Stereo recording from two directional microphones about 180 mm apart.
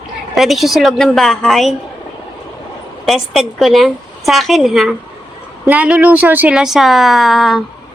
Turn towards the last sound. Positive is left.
turn(degrees=0)  # may be behind; listen again after turning